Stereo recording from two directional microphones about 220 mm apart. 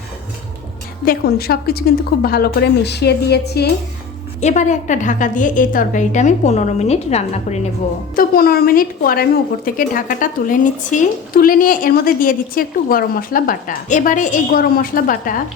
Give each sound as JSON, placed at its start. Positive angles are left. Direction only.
{"t": 1.0, "sound": "a woman's voice", "side_deg": 45}
{"t": 4.4, "sound": "a woman's voice", "side_deg": 30}
{"t": 8.1, "sound": "a woman's voice", "side_deg": 40}